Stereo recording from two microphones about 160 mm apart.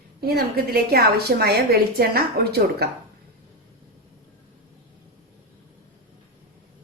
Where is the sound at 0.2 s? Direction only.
75° right (ahead or behind).